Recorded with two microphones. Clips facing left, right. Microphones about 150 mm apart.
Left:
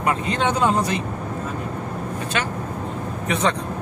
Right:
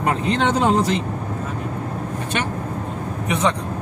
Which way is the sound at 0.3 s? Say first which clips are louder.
Right 3 dB; 85° right.